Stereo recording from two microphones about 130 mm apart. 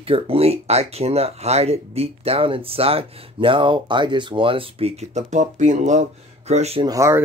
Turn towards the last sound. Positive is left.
turn(degrees=-25)  # may be behind; listen again after turning